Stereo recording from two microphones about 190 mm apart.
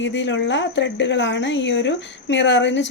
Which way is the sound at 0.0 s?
70° left (ahead or behind).